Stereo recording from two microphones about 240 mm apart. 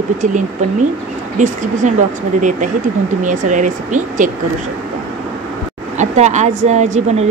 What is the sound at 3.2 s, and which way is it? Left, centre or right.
A woman's voice, right.